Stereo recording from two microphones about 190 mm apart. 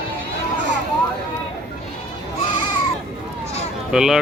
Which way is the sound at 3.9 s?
5° right (ahead or behind).